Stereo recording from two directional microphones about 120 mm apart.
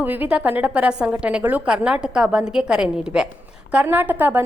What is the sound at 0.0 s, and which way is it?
A woman's voice, 15° right (ahead or behind).